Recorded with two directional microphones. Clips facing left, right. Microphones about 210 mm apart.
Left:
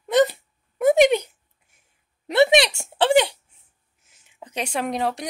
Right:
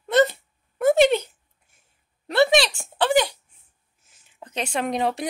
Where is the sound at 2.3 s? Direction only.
20° left (ahead or behind).